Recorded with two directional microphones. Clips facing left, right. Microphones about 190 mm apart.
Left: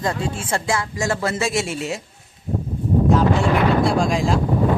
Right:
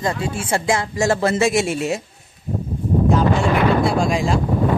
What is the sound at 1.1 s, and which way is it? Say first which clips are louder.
Speech: right 5 dB; 25° right (ahead or behind).